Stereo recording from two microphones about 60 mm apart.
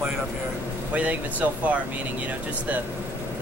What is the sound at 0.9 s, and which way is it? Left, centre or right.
Speech, right.